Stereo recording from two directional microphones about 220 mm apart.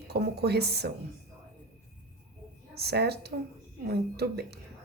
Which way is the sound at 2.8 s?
45° right (ahead or behind).